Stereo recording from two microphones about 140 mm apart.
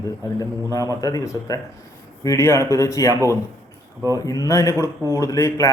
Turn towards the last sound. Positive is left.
turn(degrees=25)  # may be behind; listen again after turning